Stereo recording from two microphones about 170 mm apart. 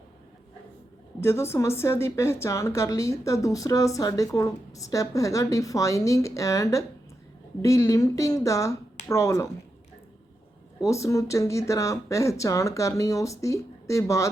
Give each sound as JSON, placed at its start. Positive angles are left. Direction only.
{"t": 1.2, "sound": "speech", "side_deg": 15}
{"t": 10.8, "sound": "speech", "side_deg": 20}